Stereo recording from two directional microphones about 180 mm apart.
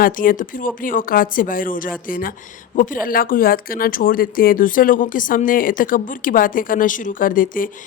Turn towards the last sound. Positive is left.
turn(degrees=50)  # may be behind; listen again after turning